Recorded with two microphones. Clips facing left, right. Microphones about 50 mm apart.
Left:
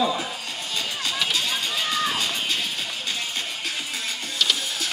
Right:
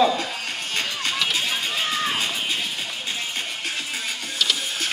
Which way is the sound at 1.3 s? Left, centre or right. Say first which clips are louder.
Right 1 dB; centre.